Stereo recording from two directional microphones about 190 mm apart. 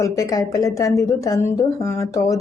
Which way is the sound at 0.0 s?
15° left (ahead or behind).